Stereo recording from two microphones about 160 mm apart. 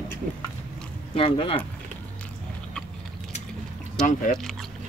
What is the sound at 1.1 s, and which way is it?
Speech, 35° left (ahead or behind).